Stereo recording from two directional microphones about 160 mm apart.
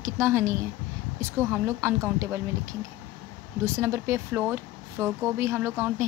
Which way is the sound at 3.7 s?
15° right (ahead or behind).